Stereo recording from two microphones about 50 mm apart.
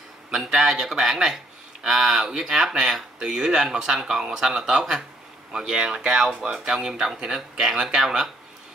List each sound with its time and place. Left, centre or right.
0.3 s speech: centre
5.5 s speech: centre